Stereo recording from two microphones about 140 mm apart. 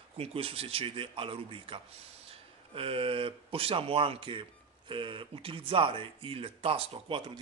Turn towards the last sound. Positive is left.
turn(degrees=-40)  # may be behind; listen again after turning